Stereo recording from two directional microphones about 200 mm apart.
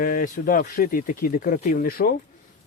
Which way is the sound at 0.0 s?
45° left (ahead or behind).